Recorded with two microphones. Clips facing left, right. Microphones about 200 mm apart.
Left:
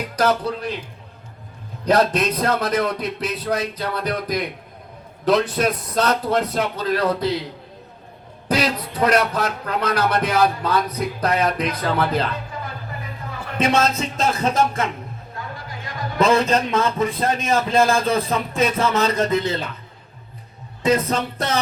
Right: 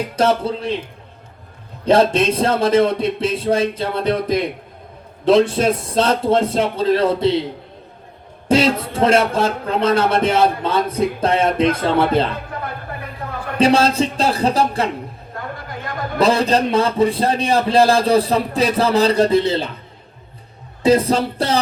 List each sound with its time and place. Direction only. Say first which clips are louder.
0.0 s a man's voice: right 3 dB; 25° right (ahead or behind)
1.8 s a man's voice: right 4 dB; 25° right (ahead or behind)
8.4 s a man's voice: right 6 dB; 25° right (ahead or behind)
12.5 s a sound: right 4 dB; 60° right (ahead or behind)
13.6 s a man's voice: right 5 dB; 30° right (ahead or behind)
15.4 s a sound: right 5 dB; 55° right (ahead or behind)
16.1 s a man's voice: right 2 dB; 35° right (ahead or behind)
20.8 s a man's voice: right 5 dB; 30° right (ahead or behind)